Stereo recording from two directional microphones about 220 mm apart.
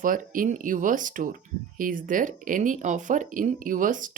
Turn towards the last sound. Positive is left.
turn(degrees=-35)  # may be behind; listen again after turning